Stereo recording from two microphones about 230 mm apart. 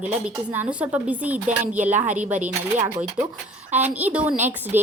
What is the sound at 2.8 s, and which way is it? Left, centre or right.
A woman's voice, centre.